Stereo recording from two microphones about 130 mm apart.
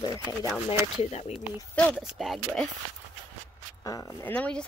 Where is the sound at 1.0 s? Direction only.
55° left (ahead or behind).